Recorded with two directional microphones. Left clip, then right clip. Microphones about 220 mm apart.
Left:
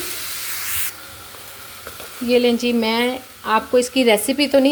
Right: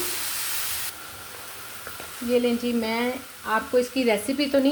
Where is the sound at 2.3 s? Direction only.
40° left (ahead or behind).